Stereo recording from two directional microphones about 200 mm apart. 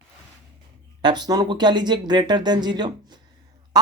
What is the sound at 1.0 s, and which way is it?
A woman's voice, 20° right (ahead or behind).